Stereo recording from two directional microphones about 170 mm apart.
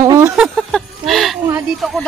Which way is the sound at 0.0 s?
15° right (ahead or behind).